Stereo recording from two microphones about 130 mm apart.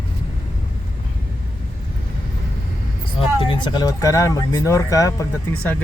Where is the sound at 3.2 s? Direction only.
40° left (ahead or behind); by 5.2 s 25° left (ahead or behind).